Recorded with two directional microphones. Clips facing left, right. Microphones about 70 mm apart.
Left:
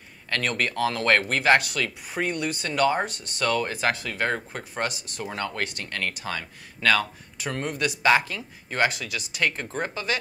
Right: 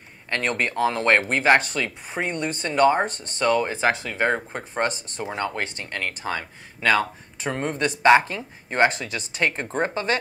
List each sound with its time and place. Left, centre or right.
0.3 s speech: right
3.4 s speech: centre
4.8 s speech: right
5.2 s speech: centre
7.5 s speech: right